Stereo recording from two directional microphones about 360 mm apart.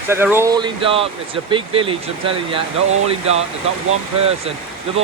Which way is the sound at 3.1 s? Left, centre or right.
Centre.